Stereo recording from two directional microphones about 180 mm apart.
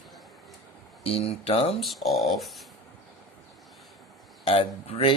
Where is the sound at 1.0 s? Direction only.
30° left (ahead or behind).